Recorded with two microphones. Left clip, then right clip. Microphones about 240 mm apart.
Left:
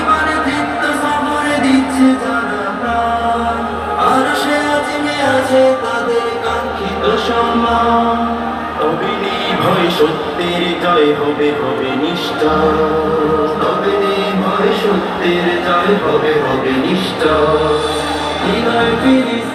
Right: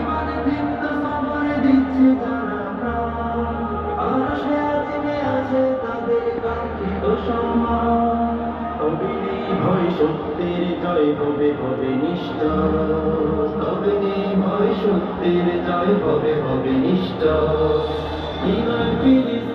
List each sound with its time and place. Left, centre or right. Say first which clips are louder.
1.6 s music: left 1 dB; left
4.1 s music: left 8 dB; left
18.8 s music: left 5 dB; right